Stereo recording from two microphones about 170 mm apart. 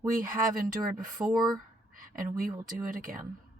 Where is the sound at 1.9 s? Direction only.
55° right (ahead or behind).